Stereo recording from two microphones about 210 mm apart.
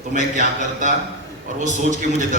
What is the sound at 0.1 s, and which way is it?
A man's voice, 35° right (ahead or behind).